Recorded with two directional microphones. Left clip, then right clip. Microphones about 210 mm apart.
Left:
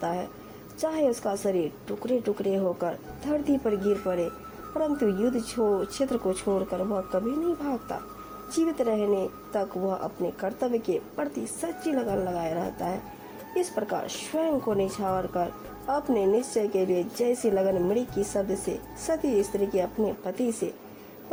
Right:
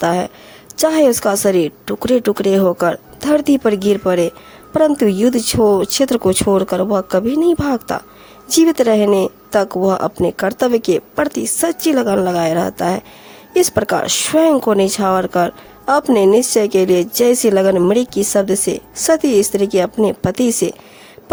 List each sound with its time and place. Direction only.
0.0 s speech: 35° right (ahead or behind)